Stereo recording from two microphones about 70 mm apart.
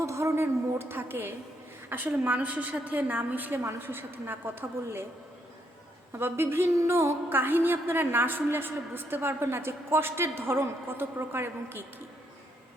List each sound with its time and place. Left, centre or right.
0.0 s a woman's voice: right
6.1 s a woman's voice: right